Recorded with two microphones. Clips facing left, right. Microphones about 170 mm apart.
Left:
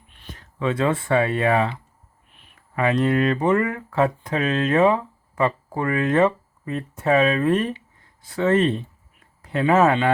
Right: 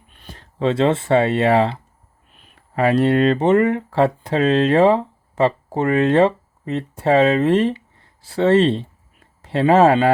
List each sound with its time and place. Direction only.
0.1 s speech: 40° right (ahead or behind)